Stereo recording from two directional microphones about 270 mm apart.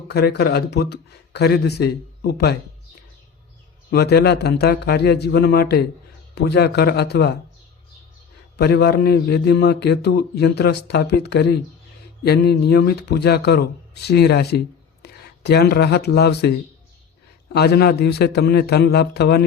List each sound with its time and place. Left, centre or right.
0.1 s a man's voice: left
3.9 s a man's voice: left
8.5 s a man's voice: left
17.5 s a man's voice: left